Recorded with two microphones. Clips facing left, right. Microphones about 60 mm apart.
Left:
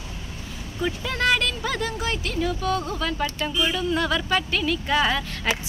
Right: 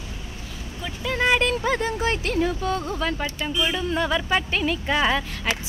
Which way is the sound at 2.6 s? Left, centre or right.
Right.